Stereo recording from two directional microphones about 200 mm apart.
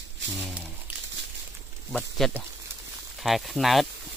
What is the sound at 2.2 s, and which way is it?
Speech, centre (ahead or behind).